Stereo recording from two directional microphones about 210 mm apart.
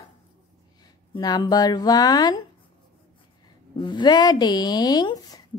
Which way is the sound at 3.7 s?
20° left (ahead or behind).